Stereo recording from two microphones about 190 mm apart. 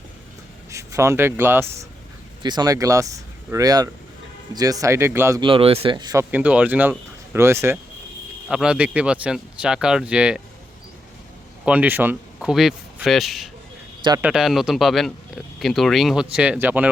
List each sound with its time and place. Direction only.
0.7 s speech: 15° right (ahead or behind)
5.4 s speech: 30° right (ahead or behind)
6.3 s speech: 5° right (ahead or behind)
8.4 s speech: 5° right (ahead or behind)
11.6 s speech: 5° right (ahead or behind)